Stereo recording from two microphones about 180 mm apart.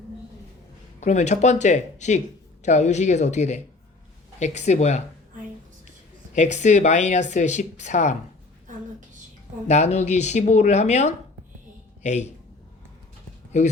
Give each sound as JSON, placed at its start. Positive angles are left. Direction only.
{"t": 0.9, "sound": "speech", "side_deg": 40}
{"t": 6.3, "sound": "speech", "side_deg": 40}
{"t": 9.6, "sound": "speech", "side_deg": 40}
{"t": 13.5, "sound": "speech", "side_deg": 40}